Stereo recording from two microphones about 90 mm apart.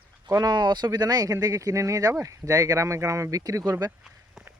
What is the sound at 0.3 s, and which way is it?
Speech, 45° right (ahead or behind).